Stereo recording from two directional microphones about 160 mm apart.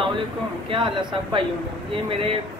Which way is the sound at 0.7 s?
30° right (ahead or behind).